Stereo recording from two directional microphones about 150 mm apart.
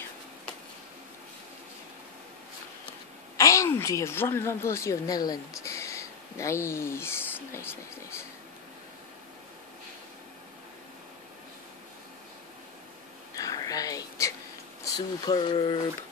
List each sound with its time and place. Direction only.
3.3 s speech: 20° left (ahead or behind)
13.4 s a sound: 25° left (ahead or behind)
15.0 s speech: 30° left (ahead or behind)